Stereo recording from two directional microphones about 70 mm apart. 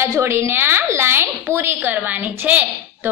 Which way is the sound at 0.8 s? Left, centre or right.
Right.